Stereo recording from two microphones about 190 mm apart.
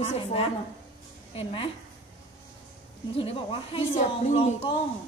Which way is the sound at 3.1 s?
30° left (ahead or behind).